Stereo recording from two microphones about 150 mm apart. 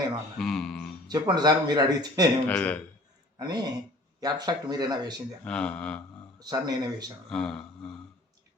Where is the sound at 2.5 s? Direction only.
10° left (ahead or behind).